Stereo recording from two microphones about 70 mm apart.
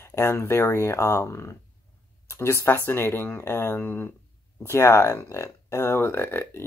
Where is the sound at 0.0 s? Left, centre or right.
Left.